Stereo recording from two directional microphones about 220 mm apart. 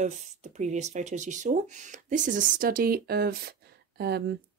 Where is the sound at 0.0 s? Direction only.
35° right (ahead or behind).